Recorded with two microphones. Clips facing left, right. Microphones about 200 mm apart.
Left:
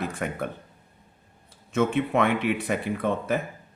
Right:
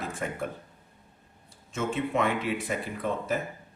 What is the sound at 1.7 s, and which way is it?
Speech, 65° left (ahead or behind).